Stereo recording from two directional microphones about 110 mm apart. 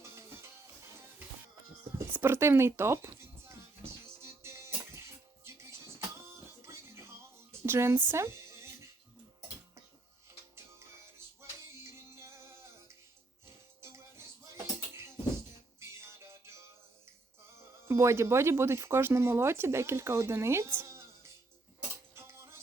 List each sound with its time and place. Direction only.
0.0 s music: 25° right (ahead or behind)
2.0 s music: 20° right (ahead or behind)
6.6 s music: 25° right (ahead or behind)
7.6 s a sound: 25° right (ahead or behind)
11.8 s music: 25° right (ahead or behind)
13.8 s music: 25° right (ahead or behind)
17.8 s speech: 25° right (ahead or behind)
22.1 s cutlery: 25° right (ahead or behind)